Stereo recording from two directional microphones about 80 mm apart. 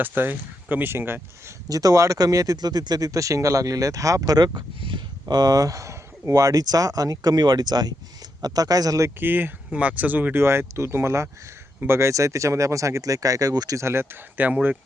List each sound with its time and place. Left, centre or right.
0.0 s speech: right
1.6 s speech: right
5.3 s speech: right
9.0 s speech: right
10.4 s speech: right
13.7 s speech: right